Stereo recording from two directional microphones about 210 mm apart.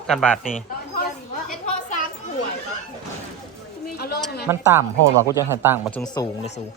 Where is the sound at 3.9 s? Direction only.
50° left (ahead or behind).